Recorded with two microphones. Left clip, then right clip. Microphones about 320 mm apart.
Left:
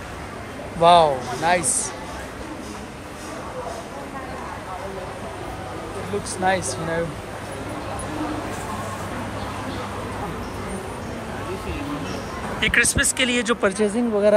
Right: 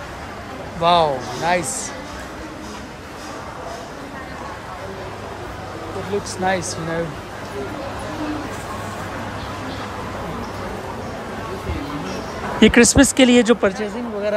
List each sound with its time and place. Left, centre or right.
0.7 s speech: centre
6.4 s speech: centre
12.5 s speech: centre